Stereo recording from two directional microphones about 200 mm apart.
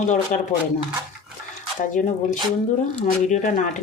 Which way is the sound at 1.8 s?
40° left (ahead or behind).